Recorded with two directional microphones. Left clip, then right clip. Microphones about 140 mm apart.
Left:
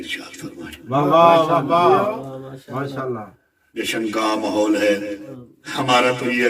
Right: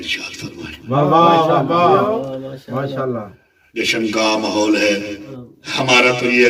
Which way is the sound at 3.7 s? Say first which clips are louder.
Right 5 dB; 30° right (ahead or behind).